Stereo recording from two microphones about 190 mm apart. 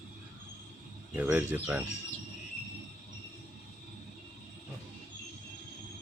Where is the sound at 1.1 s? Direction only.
10° right (ahead or behind).